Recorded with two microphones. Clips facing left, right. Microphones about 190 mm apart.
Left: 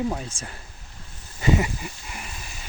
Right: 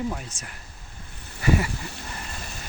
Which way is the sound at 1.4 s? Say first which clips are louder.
Left 1 dB; 20° left (ahead or behind).